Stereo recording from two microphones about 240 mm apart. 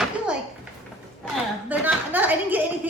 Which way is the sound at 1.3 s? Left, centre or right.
Centre.